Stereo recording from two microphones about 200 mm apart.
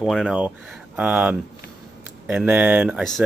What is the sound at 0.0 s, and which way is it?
Speech, centre (ahead or behind).